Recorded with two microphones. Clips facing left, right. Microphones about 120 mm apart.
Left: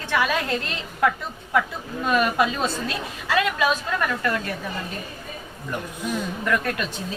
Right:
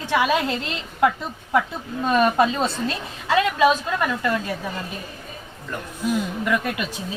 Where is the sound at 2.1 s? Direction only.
30° right (ahead or behind).